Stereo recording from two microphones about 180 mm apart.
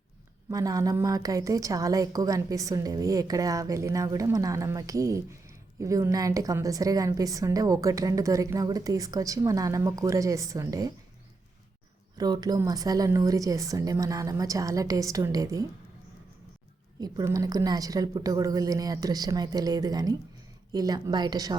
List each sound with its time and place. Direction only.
0.5 s a woman's voice: 20° right (ahead or behind)
12.1 s a woman's voice: 20° right (ahead or behind)
17.0 s a woman's voice: 20° right (ahead or behind)